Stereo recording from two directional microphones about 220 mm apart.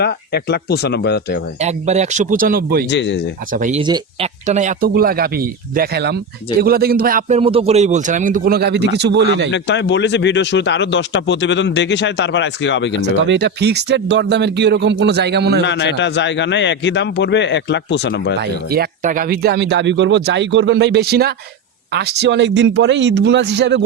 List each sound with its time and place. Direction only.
0.0 s speech: 50° left (ahead or behind)
1.6 s a man's voice: 30° right (ahead or behind)
2.9 s speech: 55° left (ahead or behind)
3.5 s a man's voice: 35° right (ahead or behind)
3.8 s speech: 20° right (ahead or behind)
4.4 s a man's voice: 35° right (ahead or behind); by 9.5 s 50° right (ahead or behind)
9.5 s speech: 55° left (ahead or behind)
13.0 s speech: 55° right (ahead or behind)
15.6 s speech: 55° left (ahead or behind)
18.3 s speech: 45° right (ahead or behind)